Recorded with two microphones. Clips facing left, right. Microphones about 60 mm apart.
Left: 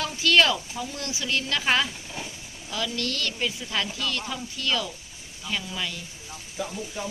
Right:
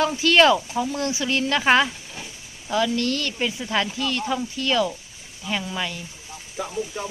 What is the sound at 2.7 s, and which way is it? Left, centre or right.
Speech, centre.